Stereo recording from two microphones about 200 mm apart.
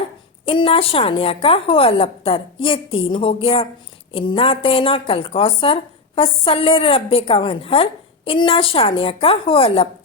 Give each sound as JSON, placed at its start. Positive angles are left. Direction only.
{"t": 0.4, "sound": "a woman's voice", "side_deg": 25}